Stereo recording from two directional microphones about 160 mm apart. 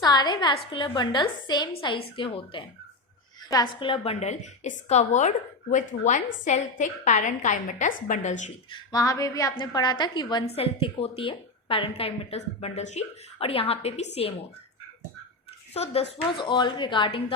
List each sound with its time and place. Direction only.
0.0 s a woman's voice: 25° left (ahead or behind); by 8.5 s 50° left (ahead or behind)
8.7 s a woman's voice: 25° left (ahead or behind); by 14.3 s 40° left (ahead or behind)
15.7 s a woman's voice: 40° left (ahead or behind)